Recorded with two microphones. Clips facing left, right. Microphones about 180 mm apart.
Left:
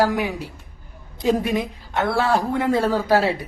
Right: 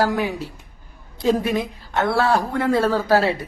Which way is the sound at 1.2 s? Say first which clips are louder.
Right 1 dB; 15° left (ahead or behind).